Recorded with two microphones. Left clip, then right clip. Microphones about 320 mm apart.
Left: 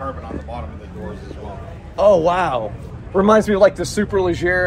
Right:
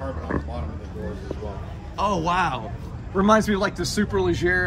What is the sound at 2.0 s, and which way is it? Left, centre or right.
Speech, centre.